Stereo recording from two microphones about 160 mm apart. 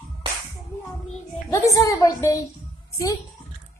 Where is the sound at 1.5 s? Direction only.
20° left (ahead or behind).